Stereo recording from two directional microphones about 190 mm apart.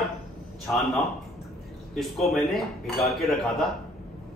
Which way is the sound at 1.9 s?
Centre (ahead or behind).